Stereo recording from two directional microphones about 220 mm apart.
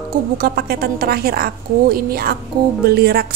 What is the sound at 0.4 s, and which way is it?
A woman's voice, 45° right (ahead or behind).